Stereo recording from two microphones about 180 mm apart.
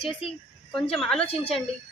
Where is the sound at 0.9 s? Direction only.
Centre (ahead or behind).